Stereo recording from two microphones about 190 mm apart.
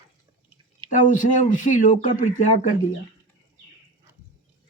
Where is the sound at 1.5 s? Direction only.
40° left (ahead or behind).